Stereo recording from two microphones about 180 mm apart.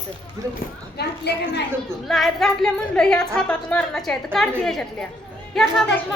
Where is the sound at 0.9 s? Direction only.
65° left (ahead or behind).